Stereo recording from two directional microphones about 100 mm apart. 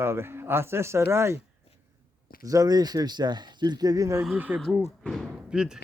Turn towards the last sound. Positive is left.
turn(degrees=-5)  # may be behind; listen again after turning